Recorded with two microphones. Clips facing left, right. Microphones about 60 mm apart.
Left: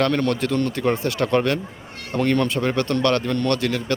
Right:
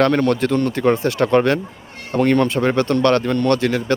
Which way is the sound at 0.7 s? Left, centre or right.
Right.